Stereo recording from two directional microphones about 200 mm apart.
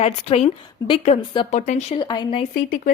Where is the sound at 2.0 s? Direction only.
20° left (ahead or behind).